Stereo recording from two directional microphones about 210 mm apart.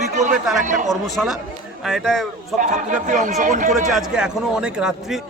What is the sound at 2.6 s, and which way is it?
Speech, 35° right (ahead or behind).